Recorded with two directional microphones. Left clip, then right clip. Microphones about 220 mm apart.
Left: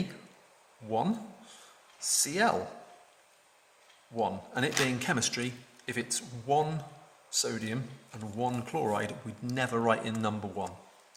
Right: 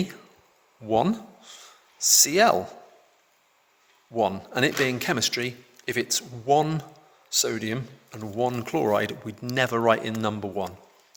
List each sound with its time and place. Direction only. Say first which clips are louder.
0.9 s speech: right 8 dB; 45° right (ahead or behind)
4.1 s speech: right 7 dB; 40° right (ahead or behind)